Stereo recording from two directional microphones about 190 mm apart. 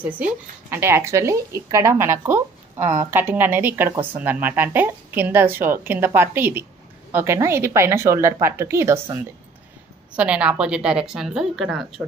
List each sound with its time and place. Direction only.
0.7 s a woman's voice: 15° right (ahead or behind)
3.9 s a woman's voice: 30° right (ahead or behind)
4.2 s a woman's voice: 10° right (ahead or behind)